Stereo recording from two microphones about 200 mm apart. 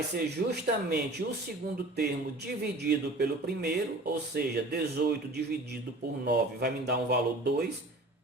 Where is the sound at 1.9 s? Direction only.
55° right (ahead or behind).